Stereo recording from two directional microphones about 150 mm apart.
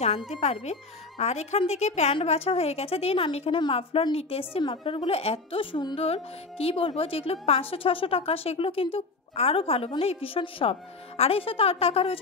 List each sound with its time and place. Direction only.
0.3 s speech: 45° left (ahead or behind)